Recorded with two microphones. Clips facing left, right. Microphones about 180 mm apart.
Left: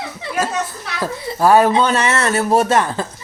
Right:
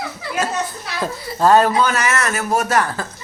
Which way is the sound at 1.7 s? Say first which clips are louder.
Left 2 dB; 30° left (ahead or behind).